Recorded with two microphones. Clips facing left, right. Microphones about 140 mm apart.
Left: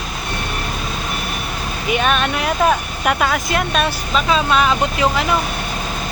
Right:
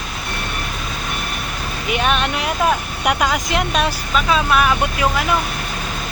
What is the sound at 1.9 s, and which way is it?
Speech, 15° right (ahead or behind).